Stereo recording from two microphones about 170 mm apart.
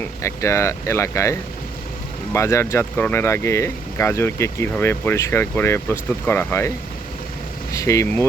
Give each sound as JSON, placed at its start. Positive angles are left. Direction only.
{"t": 0.2, "sound": "speech", "side_deg": 15}
{"t": 7.7, "sound": "speech", "side_deg": 20}